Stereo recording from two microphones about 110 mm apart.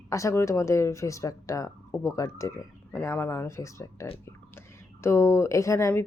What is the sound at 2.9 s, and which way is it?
Speech, 15° left (ahead or behind).